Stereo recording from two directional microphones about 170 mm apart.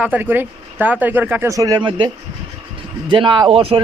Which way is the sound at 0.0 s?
10° right (ahead or behind).